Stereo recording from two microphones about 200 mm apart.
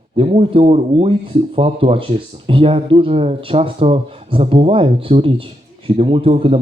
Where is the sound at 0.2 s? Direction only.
30° right (ahead or behind).